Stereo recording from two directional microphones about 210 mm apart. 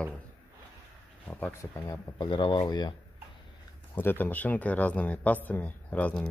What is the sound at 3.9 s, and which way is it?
A man's voice, 10° left (ahead or behind).